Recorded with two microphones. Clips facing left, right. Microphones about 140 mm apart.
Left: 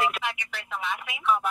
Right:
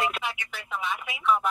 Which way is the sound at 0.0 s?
Centre (ahead or behind).